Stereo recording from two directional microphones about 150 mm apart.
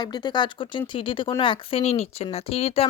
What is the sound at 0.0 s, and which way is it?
A woman's voice, 30° left (ahead or behind).